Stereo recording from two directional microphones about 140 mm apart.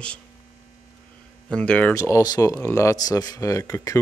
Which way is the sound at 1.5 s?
10° left (ahead or behind).